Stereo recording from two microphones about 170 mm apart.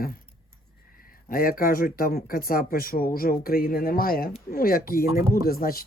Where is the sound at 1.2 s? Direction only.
60° left (ahead or behind).